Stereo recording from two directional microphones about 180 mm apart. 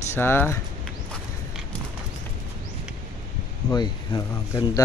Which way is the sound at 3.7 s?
25° left (ahead or behind).